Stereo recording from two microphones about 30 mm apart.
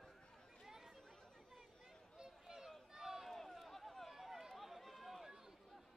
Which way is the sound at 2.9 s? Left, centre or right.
Centre.